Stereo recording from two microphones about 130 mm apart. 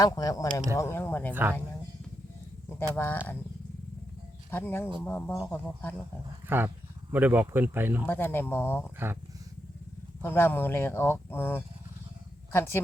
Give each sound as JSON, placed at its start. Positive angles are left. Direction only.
{"t": 0.0, "sound": "speech", "side_deg": 30}
{"t": 1.3, "sound": "speech", "side_deg": -15}
{"t": 2.9, "sound": "speech", "side_deg": 15}
{"t": 4.5, "sound": "speech", "side_deg": 15}
{"t": 6.4, "sound": "a sound", "side_deg": -15}
{"t": 7.1, "sound": "speech", "side_deg": -15}
{"t": 8.0, "sound": "speech", "side_deg": 15}
{"t": 10.2, "sound": "speech", "side_deg": 15}